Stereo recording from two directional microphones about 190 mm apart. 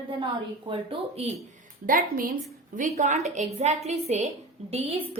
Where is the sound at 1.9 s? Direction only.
50° right (ahead or behind).